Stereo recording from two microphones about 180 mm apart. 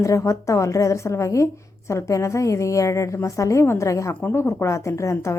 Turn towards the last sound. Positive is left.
turn(degrees=15)  # may be behind; listen again after turning